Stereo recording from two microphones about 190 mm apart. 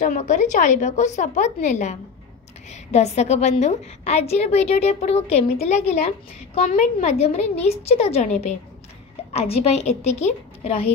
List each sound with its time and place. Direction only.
0.0 s a woman's voice: 40° left (ahead or behind)